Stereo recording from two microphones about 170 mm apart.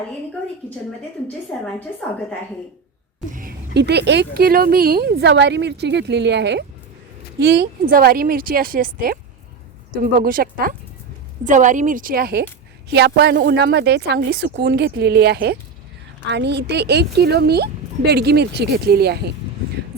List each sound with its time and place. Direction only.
3.8 s speech: 80° right
7.3 s a woman's voice: 80° right
12.9 s speech: 80° right
16.2 s speech: 90° right; by 19.2 s 70° right (ahead or behind)